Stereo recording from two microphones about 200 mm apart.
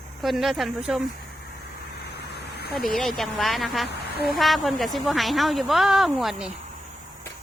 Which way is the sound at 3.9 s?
50° left (ahead or behind).